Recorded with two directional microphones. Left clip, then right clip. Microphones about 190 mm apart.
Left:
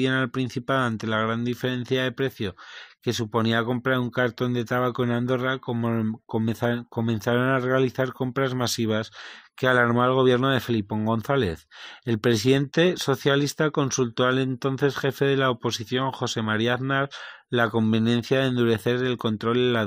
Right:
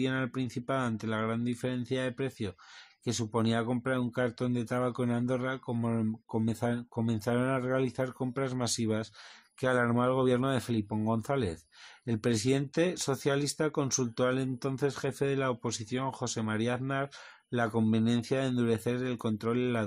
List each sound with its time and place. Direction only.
0.0 s speech: 20° left (ahead or behind)